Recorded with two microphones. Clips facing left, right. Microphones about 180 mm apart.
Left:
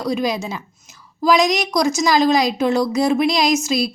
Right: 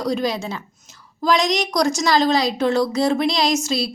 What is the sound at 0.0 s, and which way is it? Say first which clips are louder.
A woman's voice: left 1 dB; 10° left (ahead or behind).